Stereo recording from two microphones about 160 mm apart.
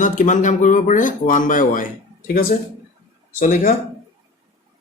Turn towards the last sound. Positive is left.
turn(degrees=55)  # may be behind; listen again after turning